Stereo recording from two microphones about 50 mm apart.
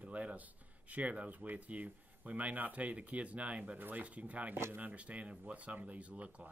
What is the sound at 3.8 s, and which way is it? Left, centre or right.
Speech, right.